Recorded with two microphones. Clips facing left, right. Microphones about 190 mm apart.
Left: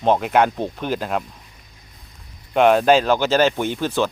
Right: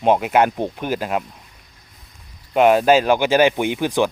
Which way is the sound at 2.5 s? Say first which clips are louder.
Right 1 dB; 5° right (ahead or behind).